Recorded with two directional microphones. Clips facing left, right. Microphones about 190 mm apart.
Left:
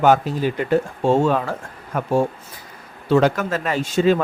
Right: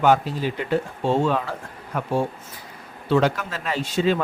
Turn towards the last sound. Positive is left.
turn(degrees=45)  # may be behind; listen again after turning